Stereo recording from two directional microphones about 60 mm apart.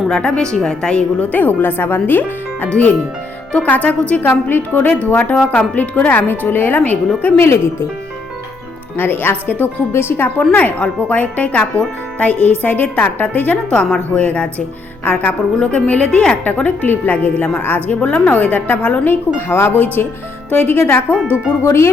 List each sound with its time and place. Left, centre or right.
0.1 s a woman's voice: centre
1.3 s speech: left
7.3 s speech: left
9.0 s speech: left
10.5 s speech: left
13.7 s speech: centre
16.6 s speech: left
19.0 s speech: left